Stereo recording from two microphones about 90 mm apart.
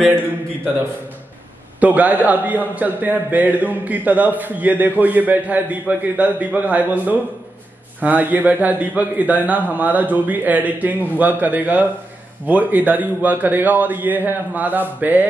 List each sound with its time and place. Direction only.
1.8 s a man's voice: 20° right (ahead or behind)